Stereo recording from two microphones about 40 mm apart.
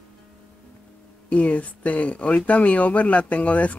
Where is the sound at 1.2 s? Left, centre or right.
Left.